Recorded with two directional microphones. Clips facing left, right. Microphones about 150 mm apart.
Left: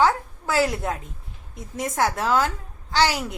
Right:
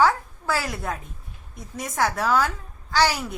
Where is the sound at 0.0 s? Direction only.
20° left (ahead or behind).